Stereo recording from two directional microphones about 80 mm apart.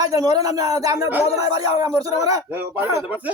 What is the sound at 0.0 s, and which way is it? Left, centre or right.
Speech, right.